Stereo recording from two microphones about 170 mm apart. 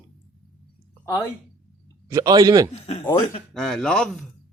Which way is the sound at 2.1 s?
20° right (ahead or behind).